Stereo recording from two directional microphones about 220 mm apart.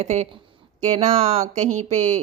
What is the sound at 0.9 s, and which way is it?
Speech, 30° right (ahead or behind).